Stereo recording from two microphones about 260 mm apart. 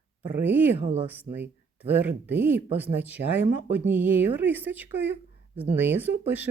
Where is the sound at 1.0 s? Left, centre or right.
Centre.